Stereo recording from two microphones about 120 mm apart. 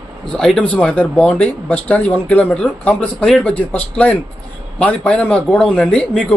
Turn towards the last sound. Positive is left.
turn(degrees=10)  # may be behind; listen again after turning